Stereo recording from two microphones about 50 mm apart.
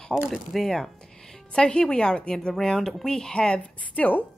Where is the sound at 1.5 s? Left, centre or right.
Centre.